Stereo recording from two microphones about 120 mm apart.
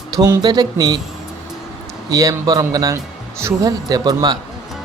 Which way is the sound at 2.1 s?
30° right (ahead or behind).